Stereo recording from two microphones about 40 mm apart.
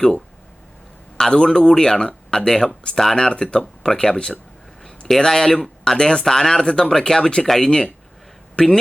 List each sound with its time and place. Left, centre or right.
1.3 s speech: centre
4.8 s a sound: centre
5.2 s speech: centre
7.4 s speech: centre